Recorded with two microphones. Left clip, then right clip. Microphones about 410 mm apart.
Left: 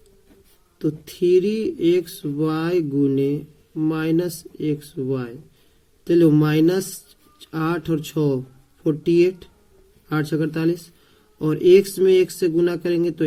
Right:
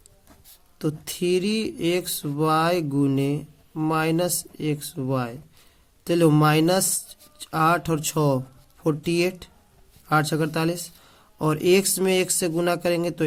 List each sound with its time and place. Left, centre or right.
0.8 s a man's voice: right